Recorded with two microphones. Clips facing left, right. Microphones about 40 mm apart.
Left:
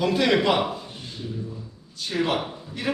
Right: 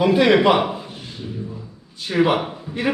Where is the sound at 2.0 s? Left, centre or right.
Right.